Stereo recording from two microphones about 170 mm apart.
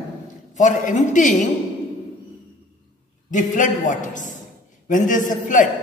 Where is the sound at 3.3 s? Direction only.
50° left (ahead or behind).